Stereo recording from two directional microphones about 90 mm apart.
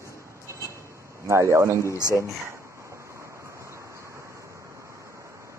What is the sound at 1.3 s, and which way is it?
Speech, 30° right (ahead or behind).